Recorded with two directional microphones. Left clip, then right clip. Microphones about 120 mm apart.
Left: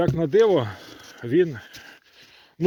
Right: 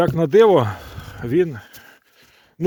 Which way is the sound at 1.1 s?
90° right.